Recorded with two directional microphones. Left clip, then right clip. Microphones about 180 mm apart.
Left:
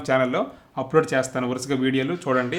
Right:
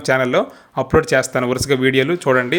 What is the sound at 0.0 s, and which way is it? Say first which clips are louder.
Speech: right 5 dB; 25° right (ahead or behind).